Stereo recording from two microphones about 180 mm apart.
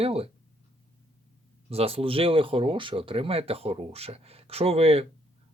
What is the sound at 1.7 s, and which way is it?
Speech, 35° right (ahead or behind).